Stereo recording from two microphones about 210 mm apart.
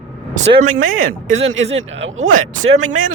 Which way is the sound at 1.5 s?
60° right (ahead or behind).